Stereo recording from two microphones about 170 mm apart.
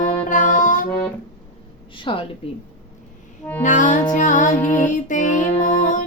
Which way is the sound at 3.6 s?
50° left (ahead or behind).